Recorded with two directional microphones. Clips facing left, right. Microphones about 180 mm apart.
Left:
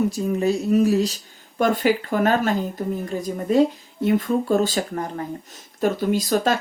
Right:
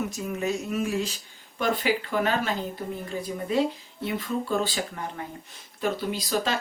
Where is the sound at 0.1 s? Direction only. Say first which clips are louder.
Left 7 dB; 35° left (ahead or behind).